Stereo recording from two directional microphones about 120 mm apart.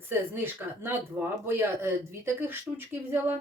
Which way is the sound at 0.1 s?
20° right (ahead or behind).